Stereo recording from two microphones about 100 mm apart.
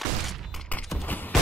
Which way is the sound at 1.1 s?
20° left (ahead or behind).